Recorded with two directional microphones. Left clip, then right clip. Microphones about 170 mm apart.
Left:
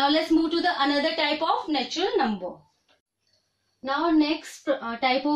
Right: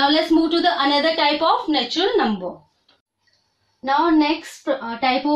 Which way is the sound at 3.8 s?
10° right (ahead or behind).